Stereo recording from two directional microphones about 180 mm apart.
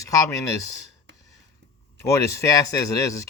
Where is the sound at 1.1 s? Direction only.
75° right (ahead or behind).